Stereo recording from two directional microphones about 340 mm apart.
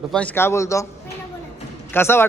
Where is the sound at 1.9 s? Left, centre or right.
Centre.